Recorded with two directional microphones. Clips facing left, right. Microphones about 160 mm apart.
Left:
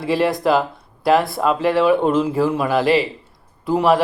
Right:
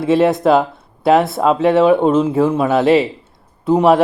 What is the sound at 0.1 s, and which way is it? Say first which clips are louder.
Speech: right 5 dB; 25° right (ahead or behind).